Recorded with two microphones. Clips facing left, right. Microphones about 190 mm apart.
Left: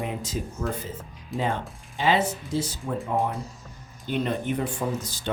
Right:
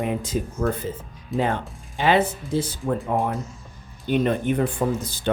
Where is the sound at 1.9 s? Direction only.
60° right (ahead or behind).